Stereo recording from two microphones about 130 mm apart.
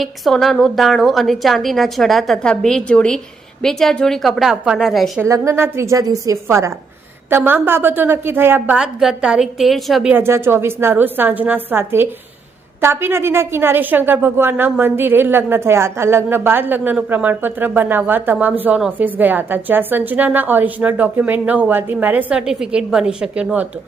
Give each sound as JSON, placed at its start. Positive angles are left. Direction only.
{"t": 0.0, "sound": "a woman's voice", "side_deg": 0}
{"t": 5.5, "sound": "a woman's voice", "side_deg": -20}
{"t": 10.1, "sound": "a woman's voice", "side_deg": -15}